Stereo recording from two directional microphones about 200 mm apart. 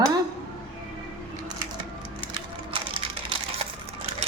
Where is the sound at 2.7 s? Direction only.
25° right (ahead or behind).